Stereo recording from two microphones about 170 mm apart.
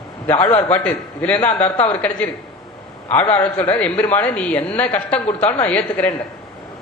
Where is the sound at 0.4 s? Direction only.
35° left (ahead or behind).